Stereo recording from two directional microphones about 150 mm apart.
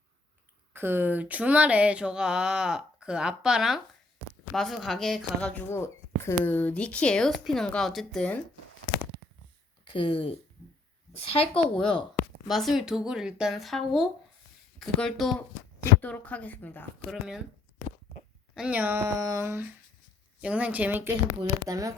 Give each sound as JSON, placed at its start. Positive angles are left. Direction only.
{"t": 0.7, "sound": "a sound", "side_deg": -15}
{"t": 4.5, "sound": "speech", "side_deg": 0}
{"t": 10.0, "sound": "speech", "side_deg": 40}
{"t": 11.5, "sound": "a woman's voice", "side_deg": 5}
{"t": 17.1, "sound": "speech", "side_deg": -5}
{"t": 18.5, "sound": "a sound", "side_deg": -10}
{"t": 19.2, "sound": "humming", "side_deg": -20}
{"t": 20.4, "sound": "a sound", "side_deg": -10}
{"t": 21.7, "sound": "humming", "side_deg": -20}